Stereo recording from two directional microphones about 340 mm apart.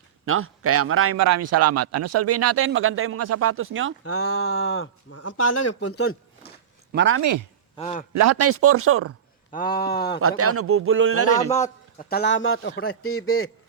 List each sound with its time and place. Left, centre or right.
0.3 s speech: right
1.1 s a man's voice: right
4.0 s speech: left
6.9 s speech: right
7.2 s speech: right
7.8 s speech: centre
8.1 s speech: right
9.5 s speech: left
10.2 s speech: right
11.5 s speech: left
13.1 s speech: left